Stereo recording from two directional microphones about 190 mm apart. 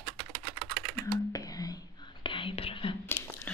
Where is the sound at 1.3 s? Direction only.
20° left (ahead or behind).